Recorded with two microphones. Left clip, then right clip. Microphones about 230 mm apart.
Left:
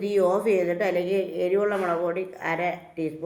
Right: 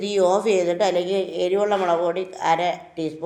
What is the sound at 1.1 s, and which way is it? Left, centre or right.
Speech, right.